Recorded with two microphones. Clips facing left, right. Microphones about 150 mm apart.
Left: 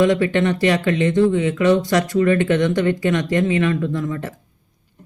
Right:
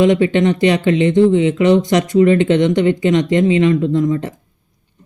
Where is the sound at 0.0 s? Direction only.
20° right (ahead or behind).